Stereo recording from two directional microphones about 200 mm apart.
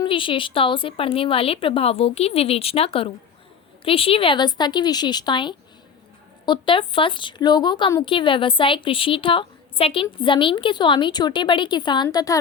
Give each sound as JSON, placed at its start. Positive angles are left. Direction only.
{"t": 0.0, "sound": "a woman's voice", "side_deg": 25}